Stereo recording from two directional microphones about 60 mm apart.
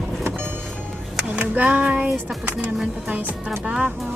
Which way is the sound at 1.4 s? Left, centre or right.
Right.